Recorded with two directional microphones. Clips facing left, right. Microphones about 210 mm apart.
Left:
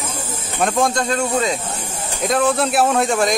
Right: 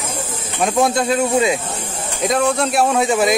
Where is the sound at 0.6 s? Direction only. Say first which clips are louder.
Right 2 dB; centre (ahead or behind).